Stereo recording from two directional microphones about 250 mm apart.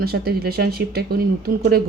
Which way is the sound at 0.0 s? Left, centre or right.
Right.